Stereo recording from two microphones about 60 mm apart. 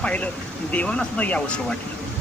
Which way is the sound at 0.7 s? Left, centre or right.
Left.